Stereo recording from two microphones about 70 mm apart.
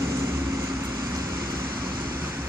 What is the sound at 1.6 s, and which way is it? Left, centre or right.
Vehicle, right.